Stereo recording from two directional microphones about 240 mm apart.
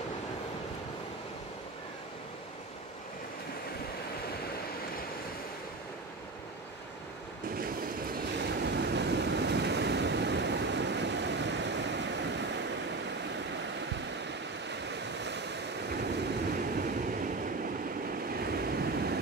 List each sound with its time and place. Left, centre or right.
7.5 s a sound: right
8.6 s waves: right
13.3 s waterfall: right
14.7 s waves: right
18.3 s vehicle: right